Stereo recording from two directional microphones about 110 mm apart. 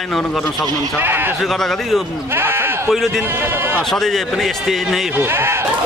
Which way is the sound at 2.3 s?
20° right (ahead or behind).